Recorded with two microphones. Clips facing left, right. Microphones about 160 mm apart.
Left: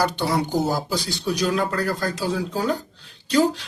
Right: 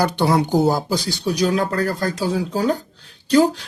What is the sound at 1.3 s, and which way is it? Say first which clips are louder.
Speech: right 4 dB; 45° right (ahead or behind).